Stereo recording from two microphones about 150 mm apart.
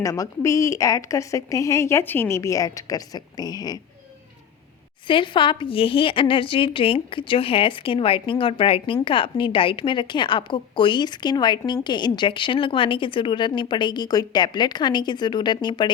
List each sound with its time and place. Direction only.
0.0 s a woman's voice: 20° left (ahead or behind)
5.0 s a woman's voice: 35° left (ahead or behind)